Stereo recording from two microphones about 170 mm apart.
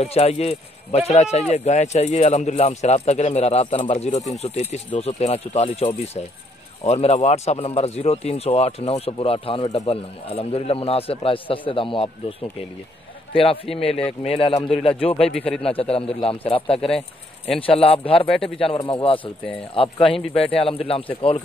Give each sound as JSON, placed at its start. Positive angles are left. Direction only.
{"t": 0.0, "sound": "speech", "side_deg": 40}